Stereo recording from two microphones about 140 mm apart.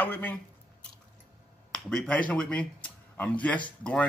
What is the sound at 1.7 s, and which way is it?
Speech, 5° left (ahead or behind).